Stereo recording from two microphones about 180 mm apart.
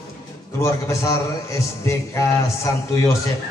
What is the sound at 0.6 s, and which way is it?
A man's voice, 15° left (ahead or behind).